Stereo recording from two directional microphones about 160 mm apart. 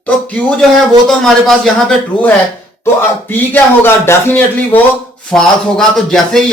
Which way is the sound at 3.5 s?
15° left (ahead or behind).